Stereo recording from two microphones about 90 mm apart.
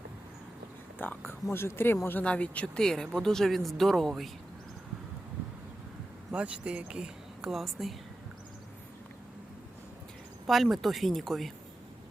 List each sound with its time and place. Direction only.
0.9 s speech: 20° left (ahead or behind); by 4.3 s centre (ahead or behind)
6.3 s speech: 15° right (ahead or behind)
10.4 s speech: centre (ahead or behind)